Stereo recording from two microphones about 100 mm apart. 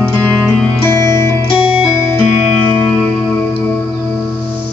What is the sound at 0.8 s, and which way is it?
Music, 30° left (ahead or behind).